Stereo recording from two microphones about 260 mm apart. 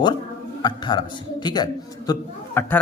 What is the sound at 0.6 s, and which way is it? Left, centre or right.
A man's voice, centre.